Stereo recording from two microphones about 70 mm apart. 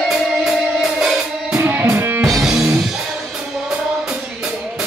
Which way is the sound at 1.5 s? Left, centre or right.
Right.